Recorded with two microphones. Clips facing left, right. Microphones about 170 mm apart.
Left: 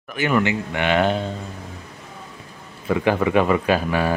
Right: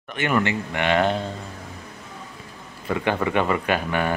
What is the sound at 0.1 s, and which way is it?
Speech, centre (ahead or behind).